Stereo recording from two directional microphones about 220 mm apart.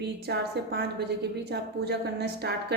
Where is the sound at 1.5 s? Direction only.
50° right (ahead or behind).